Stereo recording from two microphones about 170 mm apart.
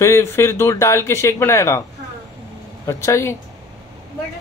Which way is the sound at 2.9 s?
15° left (ahead or behind).